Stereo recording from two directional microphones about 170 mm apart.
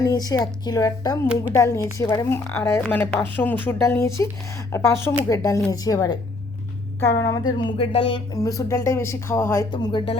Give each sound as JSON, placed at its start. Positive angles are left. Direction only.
{"t": 0.0, "sound": "a woman's voice", "side_deg": 20}
{"t": 7.2, "sound": "a woman's voice", "side_deg": 20}
{"t": 8.4, "sound": "a woman's voice", "side_deg": 20}
{"t": 9.7, "sound": "a woman's voice", "side_deg": 30}